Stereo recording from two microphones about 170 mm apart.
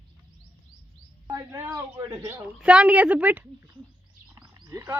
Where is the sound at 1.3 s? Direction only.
15° right (ahead or behind).